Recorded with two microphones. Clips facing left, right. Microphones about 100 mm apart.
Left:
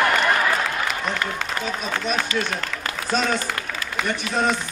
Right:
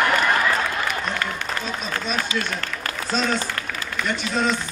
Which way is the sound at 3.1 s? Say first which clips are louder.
Left 1 dB; 50° left (ahead or behind).